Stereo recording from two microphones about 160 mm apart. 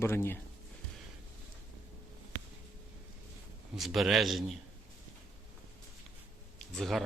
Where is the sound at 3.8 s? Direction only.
Centre (ahead or behind).